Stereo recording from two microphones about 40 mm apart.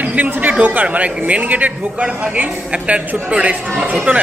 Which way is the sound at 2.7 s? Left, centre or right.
Right.